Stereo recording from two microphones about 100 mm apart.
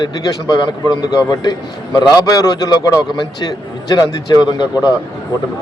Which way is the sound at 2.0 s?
40° left (ahead or behind).